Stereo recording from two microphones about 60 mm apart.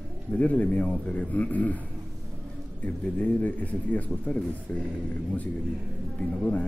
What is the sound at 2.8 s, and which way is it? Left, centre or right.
Speech, left.